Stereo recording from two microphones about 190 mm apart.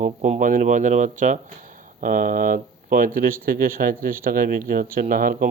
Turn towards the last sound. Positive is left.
turn(degrees=-50)  # may be behind; listen again after turning